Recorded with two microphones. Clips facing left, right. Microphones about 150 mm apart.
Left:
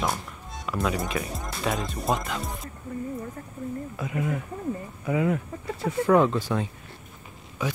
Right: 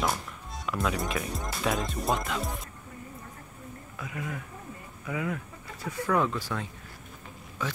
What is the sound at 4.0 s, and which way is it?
Speech, 25° left (ahead or behind).